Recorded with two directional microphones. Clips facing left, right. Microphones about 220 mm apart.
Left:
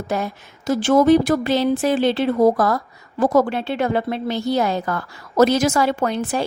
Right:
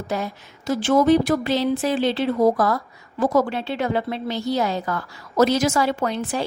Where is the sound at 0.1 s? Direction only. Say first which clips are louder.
Left 2 dB; 55° left (ahead or behind).